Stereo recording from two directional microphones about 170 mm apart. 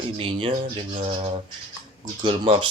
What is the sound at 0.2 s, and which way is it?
Speech, 30° right (ahead or behind).